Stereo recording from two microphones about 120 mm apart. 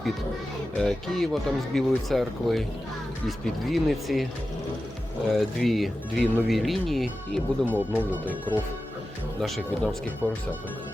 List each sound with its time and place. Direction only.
0.8 s speech: 5° left (ahead or behind)
5.3 s speech: centre (ahead or behind)
7.6 s speech: 15° left (ahead or behind)
9.4 s speech: centre (ahead or behind)